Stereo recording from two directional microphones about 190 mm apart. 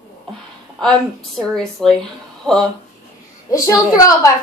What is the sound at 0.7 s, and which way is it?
A woman's voice, 5° left (ahead or behind).